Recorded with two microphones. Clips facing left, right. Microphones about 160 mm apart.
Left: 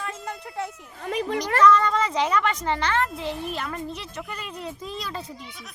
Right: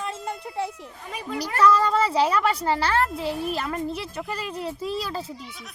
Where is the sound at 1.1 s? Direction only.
60° left (ahead or behind).